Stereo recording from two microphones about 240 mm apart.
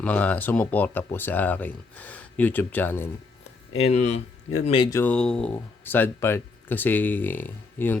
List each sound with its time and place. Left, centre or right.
0.0 s speech: centre
3.8 s speech: left; by 7.9 s centre